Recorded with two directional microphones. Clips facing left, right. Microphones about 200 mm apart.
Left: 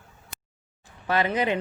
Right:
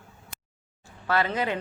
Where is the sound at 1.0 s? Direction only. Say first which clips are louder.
Left 2 dB; 20° left (ahead or behind).